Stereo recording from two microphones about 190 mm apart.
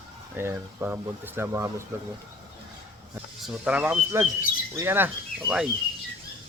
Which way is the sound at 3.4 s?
5° right (ahead or behind).